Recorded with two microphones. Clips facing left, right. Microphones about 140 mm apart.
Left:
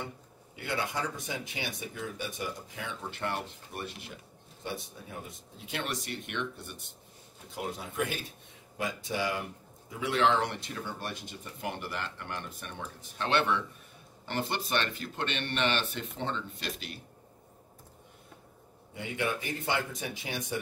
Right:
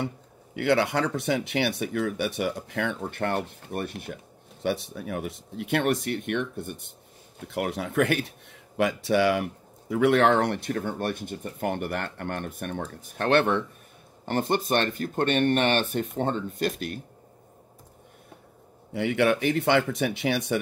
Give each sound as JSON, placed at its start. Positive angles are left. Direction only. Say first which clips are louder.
{"t": 0.6, "sound": "speech", "louder": "right 11 dB", "side_deg": -70}
{"t": 4.6, "sound": "speech", "louder": "right 11 dB", "side_deg": -80}
{"t": 7.3, "sound": "speech", "louder": "right 8 dB", "side_deg": -70}
{"t": 18.9, "sound": "speech", "louder": "right 11 dB", "side_deg": -75}